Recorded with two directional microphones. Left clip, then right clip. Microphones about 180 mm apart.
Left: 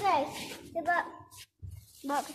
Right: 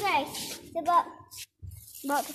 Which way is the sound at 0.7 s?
40° right (ahead or behind).